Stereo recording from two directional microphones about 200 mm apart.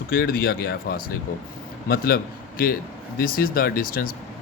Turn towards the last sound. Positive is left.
turn(degrees=45)  # may be behind; listen again after turning